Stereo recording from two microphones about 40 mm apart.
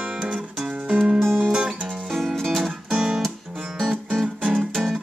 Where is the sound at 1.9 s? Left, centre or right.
Centre.